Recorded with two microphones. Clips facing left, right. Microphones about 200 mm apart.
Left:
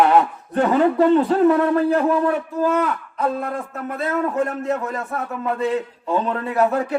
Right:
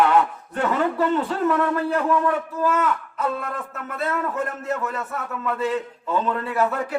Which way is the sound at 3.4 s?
35° left (ahead or behind).